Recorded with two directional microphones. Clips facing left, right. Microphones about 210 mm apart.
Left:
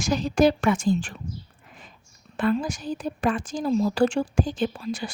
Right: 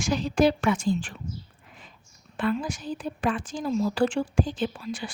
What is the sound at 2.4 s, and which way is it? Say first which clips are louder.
A woman's voice: left 3 dB; 45° left (ahead or behind).